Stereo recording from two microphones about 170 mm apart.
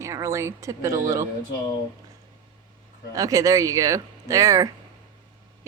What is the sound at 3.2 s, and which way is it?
Speech, 20° right (ahead or behind).